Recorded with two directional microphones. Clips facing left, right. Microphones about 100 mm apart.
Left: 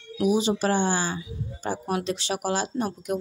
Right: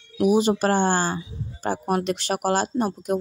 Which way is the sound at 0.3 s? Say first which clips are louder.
Right 3 dB; 50° right (ahead or behind).